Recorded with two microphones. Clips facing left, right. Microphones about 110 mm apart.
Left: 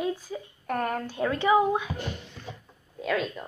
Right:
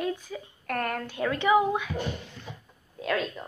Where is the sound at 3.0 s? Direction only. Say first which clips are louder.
Left 1 dB; centre (ahead or behind).